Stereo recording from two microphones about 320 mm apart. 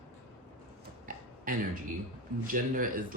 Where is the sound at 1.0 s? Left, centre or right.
Right.